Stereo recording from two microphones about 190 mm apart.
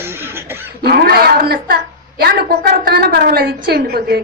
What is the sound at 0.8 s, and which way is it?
A woman's voice, 55° right (ahead or behind).